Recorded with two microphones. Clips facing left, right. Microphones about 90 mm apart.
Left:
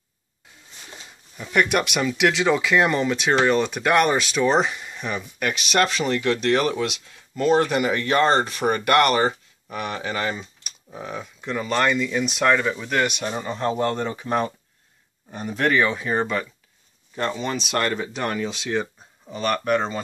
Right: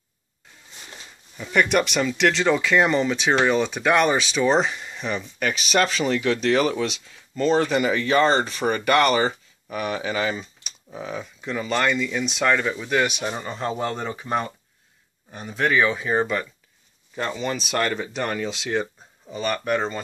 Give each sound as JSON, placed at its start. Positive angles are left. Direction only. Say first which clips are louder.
{"t": 0.8, "sound": "speech", "louder": "left 1 dB", "side_deg": 5}